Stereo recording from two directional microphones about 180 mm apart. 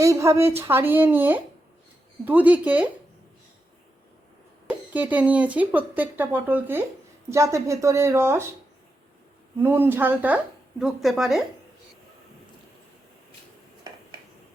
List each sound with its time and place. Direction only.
0.0 s speech: 15° right (ahead or behind)
4.7 s speech: 10° right (ahead or behind)
9.6 s speech: 10° right (ahead or behind)